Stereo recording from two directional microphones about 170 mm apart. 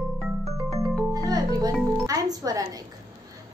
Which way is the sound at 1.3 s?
25° right (ahead or behind).